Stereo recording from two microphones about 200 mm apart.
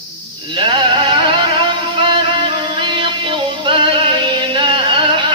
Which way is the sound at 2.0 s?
25° right (ahead or behind).